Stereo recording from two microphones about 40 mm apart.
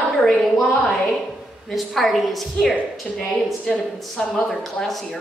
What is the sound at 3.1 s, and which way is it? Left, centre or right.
Speech, centre.